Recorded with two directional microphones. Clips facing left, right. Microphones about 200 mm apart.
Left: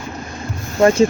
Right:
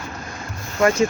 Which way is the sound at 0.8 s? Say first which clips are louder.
Left 5 dB; 30° left (ahead or behind).